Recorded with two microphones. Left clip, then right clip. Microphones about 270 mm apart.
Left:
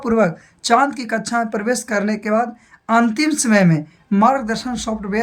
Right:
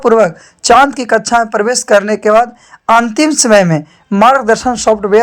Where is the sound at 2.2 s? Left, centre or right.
Right.